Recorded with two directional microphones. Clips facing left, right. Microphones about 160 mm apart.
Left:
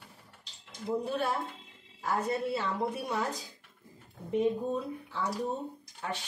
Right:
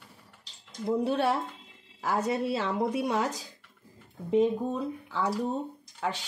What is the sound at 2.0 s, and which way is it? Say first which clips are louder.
Speech: right 3 dB; 90° right.